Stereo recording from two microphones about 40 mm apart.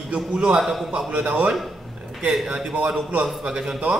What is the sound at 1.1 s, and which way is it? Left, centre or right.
Mantra, right.